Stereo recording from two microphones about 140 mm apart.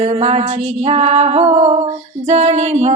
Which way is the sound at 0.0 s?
50° right (ahead or behind).